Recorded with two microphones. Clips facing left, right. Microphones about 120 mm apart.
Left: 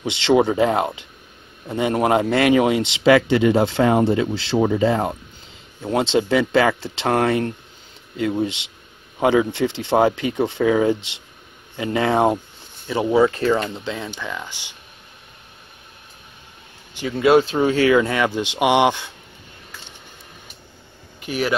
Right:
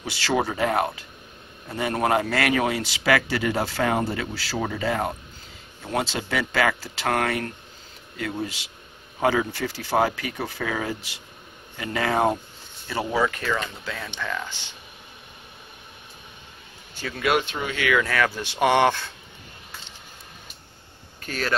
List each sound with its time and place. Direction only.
0.0 s speech: 20° left (ahead or behind)
14.1 s speech: 10° left (ahead or behind)
16.9 s speech: 15° left (ahead or behind)
17.3 s speech: 30° left (ahead or behind); by 19.1 s 15° left (ahead or behind)
21.2 s speech: 15° left (ahead or behind)